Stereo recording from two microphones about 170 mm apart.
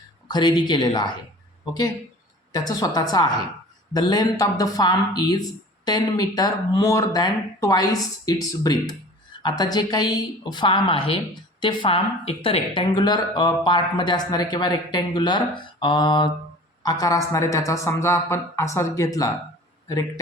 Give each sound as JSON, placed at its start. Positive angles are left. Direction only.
{"t": 0.3, "sound": "speech", "side_deg": 25}
{"t": 2.5, "sound": "speech", "side_deg": 20}